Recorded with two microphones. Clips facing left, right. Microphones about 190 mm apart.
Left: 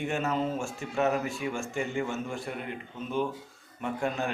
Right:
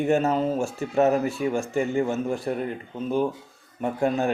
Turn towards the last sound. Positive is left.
turn(degrees=-40)  # may be behind; listen again after turning